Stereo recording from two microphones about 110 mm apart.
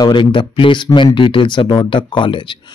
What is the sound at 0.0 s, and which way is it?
Speech, 50° left (ahead or behind).